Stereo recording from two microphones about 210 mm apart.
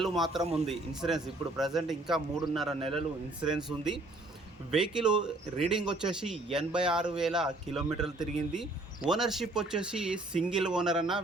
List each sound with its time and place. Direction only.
0.0 s speech: centre (ahead or behind)
0.4 s a man's voice: 30° right (ahead or behind)
0.7 s speech: centre (ahead or behind)